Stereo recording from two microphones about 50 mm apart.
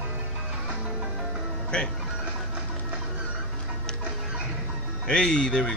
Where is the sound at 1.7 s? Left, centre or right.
Left.